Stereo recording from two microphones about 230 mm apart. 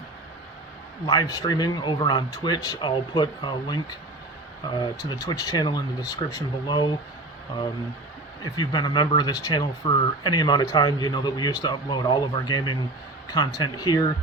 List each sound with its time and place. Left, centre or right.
1.0 s speech: centre
8.5 s speech: centre